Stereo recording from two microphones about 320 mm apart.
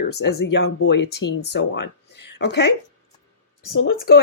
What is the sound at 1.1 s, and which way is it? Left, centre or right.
Speech, left.